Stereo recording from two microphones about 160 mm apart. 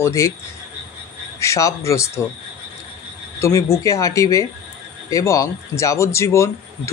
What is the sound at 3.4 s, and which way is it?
Speech, 20° left (ahead or behind).